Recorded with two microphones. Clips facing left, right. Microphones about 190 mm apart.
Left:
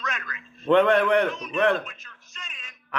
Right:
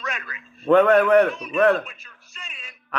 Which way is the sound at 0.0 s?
10° right (ahead or behind).